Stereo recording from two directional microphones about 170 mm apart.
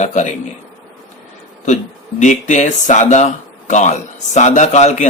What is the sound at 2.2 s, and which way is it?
Speech, 45° left (ahead or behind).